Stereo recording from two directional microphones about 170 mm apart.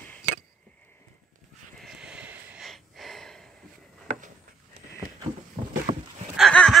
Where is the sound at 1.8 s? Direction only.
5° right (ahead or behind).